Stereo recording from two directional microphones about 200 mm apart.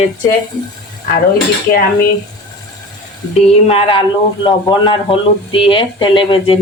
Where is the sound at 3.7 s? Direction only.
30° left (ahead or behind).